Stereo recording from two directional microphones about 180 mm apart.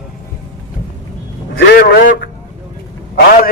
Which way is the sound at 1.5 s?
70° left (ahead or behind).